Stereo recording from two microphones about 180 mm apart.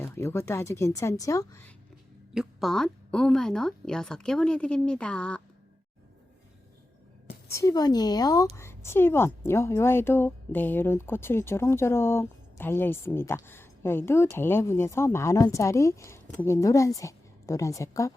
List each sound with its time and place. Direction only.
0.0 s a woman's voice: 15° left (ahead or behind)
2.3 s a woman's voice: centre (ahead or behind)
7.5 s a woman's voice: 20° left (ahead or behind)